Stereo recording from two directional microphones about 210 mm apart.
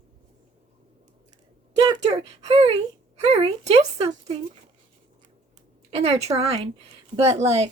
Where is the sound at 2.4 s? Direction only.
30° right (ahead or behind).